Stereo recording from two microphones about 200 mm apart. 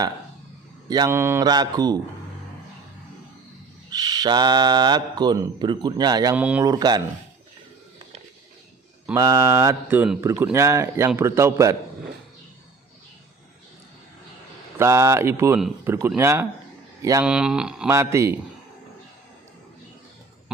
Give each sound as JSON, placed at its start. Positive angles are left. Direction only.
{"t": 0.9, "sound": "speech", "side_deg": -20}
{"t": 3.8, "sound": "speech", "side_deg": -20}
{"t": 6.3, "sound": "mantra", "side_deg": -5}
{"t": 6.7, "sound": "speech", "side_deg": -20}
{"t": 9.1, "sound": "mantra", "side_deg": -15}
{"t": 14.8, "sound": "mantra", "side_deg": -15}
{"t": 17.0, "sound": "speech", "side_deg": -15}
{"t": 17.2, "sound": "speech", "side_deg": -5}
{"t": 17.9, "sound": "mantra", "side_deg": -15}